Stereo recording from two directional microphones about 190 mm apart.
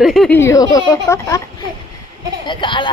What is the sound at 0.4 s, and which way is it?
A woman's voice, 15° left (ahead or behind).